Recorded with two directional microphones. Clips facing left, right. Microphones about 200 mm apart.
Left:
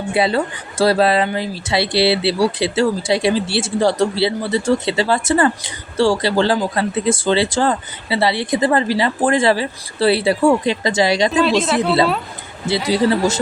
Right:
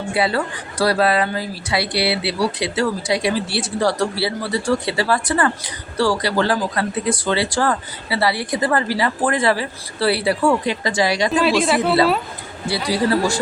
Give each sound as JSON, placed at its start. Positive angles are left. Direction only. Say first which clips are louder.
{"t": 0.1, "sound": "speech", "louder": "left 3 dB", "side_deg": 20}
{"t": 11.4, "sound": "speech", "louder": "even", "side_deg": -5}
{"t": 12.6, "sound": "speech", "louder": "left 3 dB", "side_deg": 20}